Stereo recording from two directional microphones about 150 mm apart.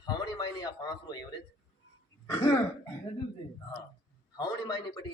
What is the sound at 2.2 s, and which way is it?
Speech, 25° left (ahead or behind).